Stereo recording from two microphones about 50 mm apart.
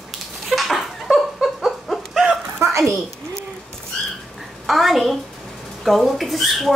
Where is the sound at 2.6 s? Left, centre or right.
Right.